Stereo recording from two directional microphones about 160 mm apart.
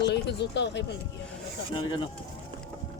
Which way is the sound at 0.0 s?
90° left.